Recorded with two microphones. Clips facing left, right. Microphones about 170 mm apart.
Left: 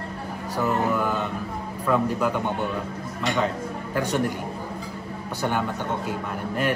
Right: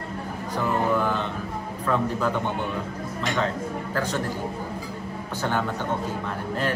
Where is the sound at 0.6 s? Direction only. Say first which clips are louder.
Even; 5° left (ahead or behind).